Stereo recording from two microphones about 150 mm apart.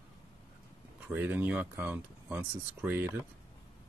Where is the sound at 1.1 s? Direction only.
10° right (ahead or behind).